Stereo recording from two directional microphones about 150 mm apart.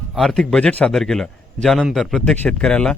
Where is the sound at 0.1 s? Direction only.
Centre (ahead or behind).